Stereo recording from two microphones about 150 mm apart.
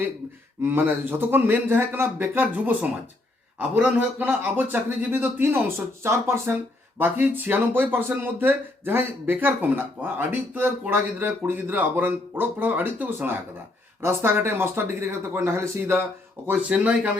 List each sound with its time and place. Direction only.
0.6 s speech: 15° right (ahead or behind)